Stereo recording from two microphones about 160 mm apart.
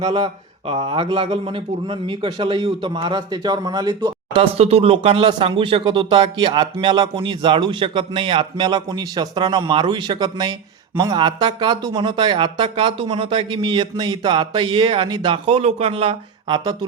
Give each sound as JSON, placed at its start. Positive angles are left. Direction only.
{"t": 0.0, "sound": "a man's voice", "side_deg": -35}
{"t": 4.5, "sound": "speech", "side_deg": -40}